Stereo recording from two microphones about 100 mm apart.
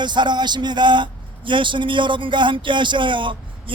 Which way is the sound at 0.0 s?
50° right (ahead or behind).